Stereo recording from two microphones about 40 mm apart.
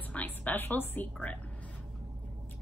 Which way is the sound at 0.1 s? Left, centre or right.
Left.